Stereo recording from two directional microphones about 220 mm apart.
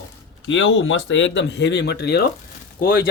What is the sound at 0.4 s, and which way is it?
Speech, 60° left (ahead or behind).